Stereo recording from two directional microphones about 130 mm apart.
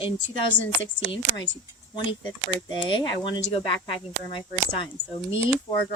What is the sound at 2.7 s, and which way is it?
Speech, 35° left (ahead or behind).